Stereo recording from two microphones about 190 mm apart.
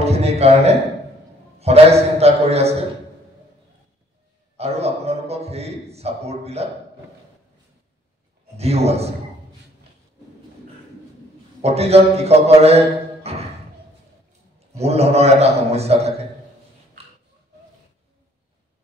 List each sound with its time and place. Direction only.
0.0 s a sound: 35° right (ahead or behind)
1.6 s a man's voice: 35° right (ahead or behind)
4.6 s a man's voice: 35° right (ahead or behind)
8.5 s a man's voice: 35° right (ahead or behind)
11.6 s a man's voice: 35° right (ahead or behind)
14.8 s a man's voice: 35° right (ahead or behind)